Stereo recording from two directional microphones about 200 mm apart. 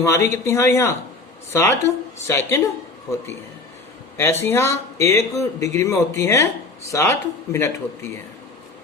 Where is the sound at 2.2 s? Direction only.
15° left (ahead or behind).